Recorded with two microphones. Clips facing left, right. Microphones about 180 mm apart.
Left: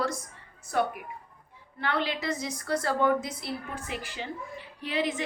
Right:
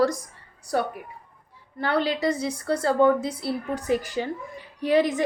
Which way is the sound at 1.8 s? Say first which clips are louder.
Right 6 dB; 35° right (ahead or behind).